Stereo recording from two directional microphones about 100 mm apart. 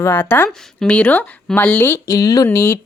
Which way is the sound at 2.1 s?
40° left (ahead or behind).